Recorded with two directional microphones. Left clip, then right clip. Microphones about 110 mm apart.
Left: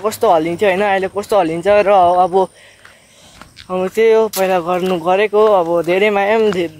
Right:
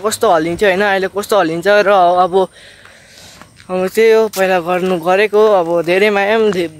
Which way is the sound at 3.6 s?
35° right (ahead or behind).